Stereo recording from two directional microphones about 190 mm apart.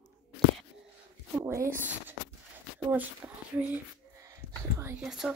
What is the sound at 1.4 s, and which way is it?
Speech, 15° right (ahead or behind).